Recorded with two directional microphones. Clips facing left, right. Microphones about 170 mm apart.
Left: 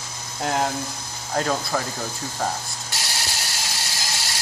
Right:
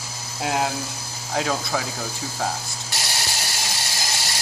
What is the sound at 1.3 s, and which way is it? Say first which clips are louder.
Speech: left 1 dB; 5° right (ahead or behind).